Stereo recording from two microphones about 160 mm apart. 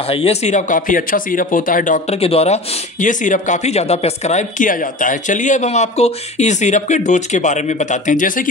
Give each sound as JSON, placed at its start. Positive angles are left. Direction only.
{"t": 0.1, "sound": "speech", "side_deg": 40}
{"t": 2.2, "sound": "speech", "side_deg": 40}